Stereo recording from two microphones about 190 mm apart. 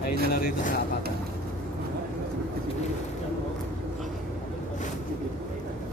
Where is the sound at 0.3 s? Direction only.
50° left (ahead or behind).